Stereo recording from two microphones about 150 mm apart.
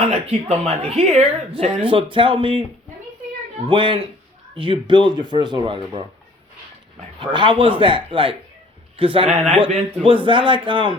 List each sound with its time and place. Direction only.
0.1 s speech: 45° right (ahead or behind)
3.7 s speech: 35° right (ahead or behind)
7.2 s speech: 35° right (ahead or behind)